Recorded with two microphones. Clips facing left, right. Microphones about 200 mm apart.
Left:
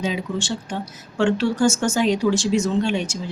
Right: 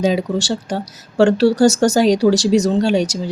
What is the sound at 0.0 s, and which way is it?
Speech, 40° right (ahead or behind).